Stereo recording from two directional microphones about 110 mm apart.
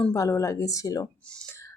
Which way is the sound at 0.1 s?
30° left (ahead or behind).